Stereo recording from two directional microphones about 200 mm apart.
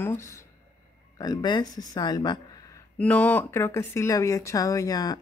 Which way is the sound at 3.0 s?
5° left (ahead or behind).